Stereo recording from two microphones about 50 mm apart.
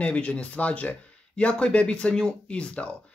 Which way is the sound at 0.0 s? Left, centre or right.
Left.